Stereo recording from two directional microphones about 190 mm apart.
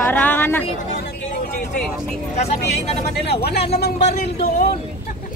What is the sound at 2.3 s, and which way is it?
Speech, 35° left (ahead or behind).